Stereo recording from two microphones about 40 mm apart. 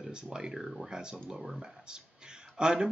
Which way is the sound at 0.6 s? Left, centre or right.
Centre.